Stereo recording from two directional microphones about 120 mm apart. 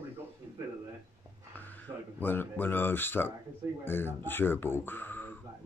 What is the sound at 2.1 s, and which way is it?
Speech, 15° left (ahead or behind).